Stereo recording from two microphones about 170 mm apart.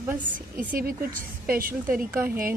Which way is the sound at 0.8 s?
60° right (ahead or behind).